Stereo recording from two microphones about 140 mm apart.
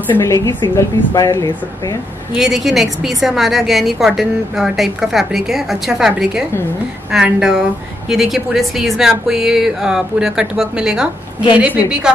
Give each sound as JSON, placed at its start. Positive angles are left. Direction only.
{"t": 0.1, "sound": "a woman's voice", "side_deg": 20}
{"t": 2.3, "sound": "a woman's voice", "side_deg": 0}